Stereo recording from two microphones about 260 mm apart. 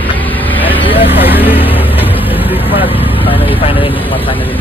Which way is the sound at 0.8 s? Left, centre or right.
Left.